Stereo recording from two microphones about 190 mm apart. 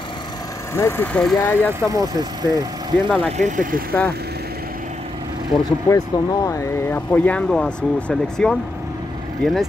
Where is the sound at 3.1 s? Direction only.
5° left (ahead or behind).